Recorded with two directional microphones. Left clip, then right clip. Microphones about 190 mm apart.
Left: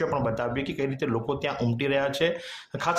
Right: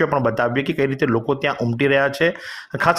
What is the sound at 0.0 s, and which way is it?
Speech, 25° right (ahead or behind).